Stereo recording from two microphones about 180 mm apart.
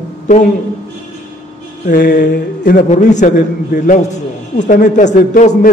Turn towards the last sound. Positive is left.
turn(degrees=45)  # may be behind; listen again after turning